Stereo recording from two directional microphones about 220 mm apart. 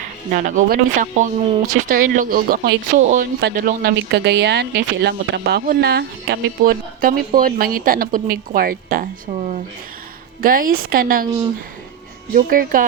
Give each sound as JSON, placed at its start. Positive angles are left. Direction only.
{"t": 0.3, "sound": "speech", "side_deg": -35}
{"t": 12.3, "sound": "speech", "side_deg": -40}